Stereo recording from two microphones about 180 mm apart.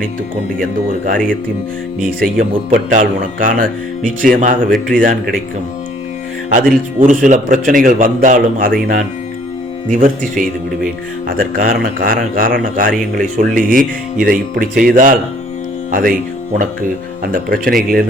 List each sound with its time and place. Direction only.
0.6 s speech: 50° right (ahead or behind)
2.0 s speech: centre (ahead or behind)
2.7 s speech: 50° right (ahead or behind)
6.5 s speech: 50° right (ahead or behind)
17.3 s speech: 50° right (ahead or behind)